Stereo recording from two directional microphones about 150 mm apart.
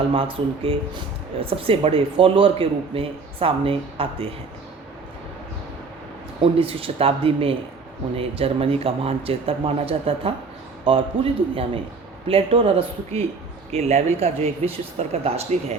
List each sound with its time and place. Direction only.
0.1 s speech: 35° right (ahead or behind)
6.4 s speech: 40° right (ahead or behind)